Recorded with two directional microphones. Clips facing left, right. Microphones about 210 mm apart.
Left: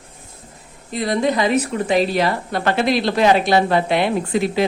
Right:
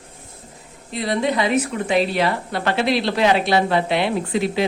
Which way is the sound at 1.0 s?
45° left (ahead or behind).